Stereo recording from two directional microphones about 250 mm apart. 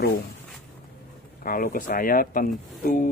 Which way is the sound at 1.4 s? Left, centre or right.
Left.